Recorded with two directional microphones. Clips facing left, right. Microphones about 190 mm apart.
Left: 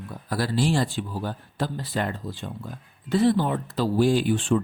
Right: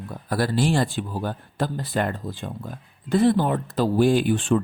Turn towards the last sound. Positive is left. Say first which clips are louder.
# right 2 dB
turn(degrees=-55)  # may be behind; listen again after turning